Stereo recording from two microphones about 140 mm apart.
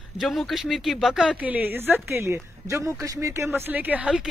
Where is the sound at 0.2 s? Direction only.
Centre (ahead or behind).